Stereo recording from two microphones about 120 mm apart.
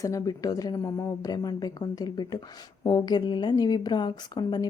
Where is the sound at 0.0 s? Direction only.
25° left (ahead or behind).